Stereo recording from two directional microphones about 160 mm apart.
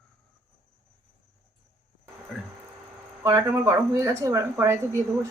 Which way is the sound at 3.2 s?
20° right (ahead or behind).